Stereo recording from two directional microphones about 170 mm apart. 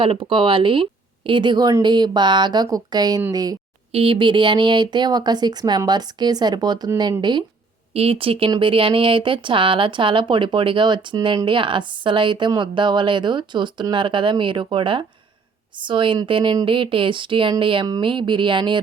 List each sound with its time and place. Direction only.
0.0 s speech: 30° right (ahead or behind)
3.9 s speech: 30° right (ahead or behind)